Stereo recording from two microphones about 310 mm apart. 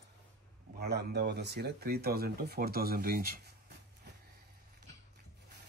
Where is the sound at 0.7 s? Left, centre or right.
Right.